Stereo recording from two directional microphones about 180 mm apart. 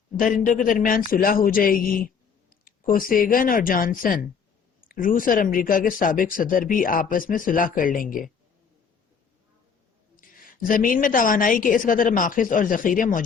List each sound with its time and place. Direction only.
0.4 s speech: 45° left (ahead or behind)
10.2 s speech: 50° left (ahead or behind)